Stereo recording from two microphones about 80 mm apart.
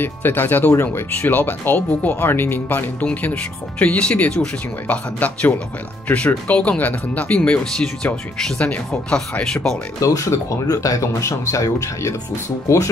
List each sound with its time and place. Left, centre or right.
0.0 s speech: left; by 9.8 s centre
9.9 s speech: left